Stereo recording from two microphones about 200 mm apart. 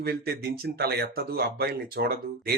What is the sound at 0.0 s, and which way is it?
Speech, 50° right (ahead or behind).